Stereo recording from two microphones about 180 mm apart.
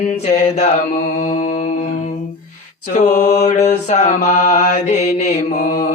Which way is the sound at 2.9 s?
40° left (ahead or behind).